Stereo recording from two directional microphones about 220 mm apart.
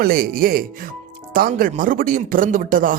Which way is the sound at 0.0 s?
40° right (ahead or behind).